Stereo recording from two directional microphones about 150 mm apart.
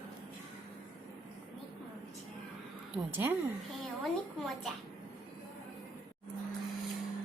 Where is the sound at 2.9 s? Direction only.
15° right (ahead or behind).